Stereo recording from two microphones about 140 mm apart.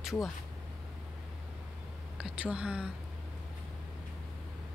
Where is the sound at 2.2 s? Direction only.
5° right (ahead or behind).